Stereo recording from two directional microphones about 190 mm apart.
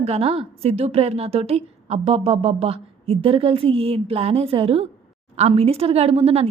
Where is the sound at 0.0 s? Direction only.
30° right (ahead or behind).